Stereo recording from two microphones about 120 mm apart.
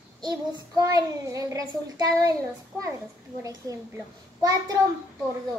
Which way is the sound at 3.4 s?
30° right (ahead or behind).